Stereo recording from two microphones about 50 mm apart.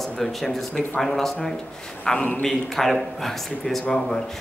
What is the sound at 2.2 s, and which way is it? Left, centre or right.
Speech, left.